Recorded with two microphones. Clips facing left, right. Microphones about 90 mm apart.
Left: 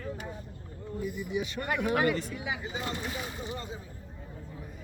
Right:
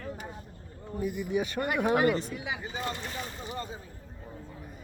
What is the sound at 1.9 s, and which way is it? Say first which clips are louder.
Speech: right 2 dB; 25° right (ahead or behind).